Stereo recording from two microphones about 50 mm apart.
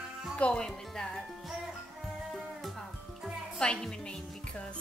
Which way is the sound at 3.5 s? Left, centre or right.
Centre.